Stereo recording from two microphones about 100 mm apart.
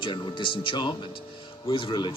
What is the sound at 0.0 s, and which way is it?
Speech, 55° left (ahead or behind).